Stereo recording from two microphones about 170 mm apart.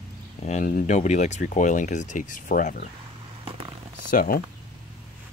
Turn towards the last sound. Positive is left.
turn(degrees=55)  # may be behind; listen again after turning